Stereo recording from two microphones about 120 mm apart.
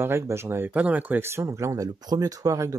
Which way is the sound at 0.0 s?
20° right (ahead or behind).